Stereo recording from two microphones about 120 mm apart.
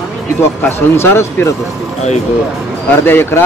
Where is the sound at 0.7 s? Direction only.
20° left (ahead or behind).